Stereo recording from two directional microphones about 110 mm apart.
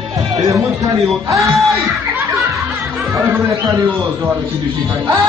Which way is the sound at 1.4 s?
Centre (ahead or behind).